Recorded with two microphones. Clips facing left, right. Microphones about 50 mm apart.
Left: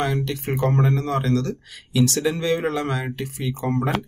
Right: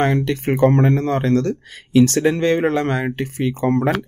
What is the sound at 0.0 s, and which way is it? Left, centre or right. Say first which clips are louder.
Speech: right 6 dB; right.